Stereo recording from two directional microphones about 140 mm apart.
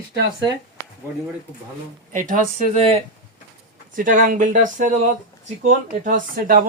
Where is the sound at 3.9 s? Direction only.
70° right (ahead or behind).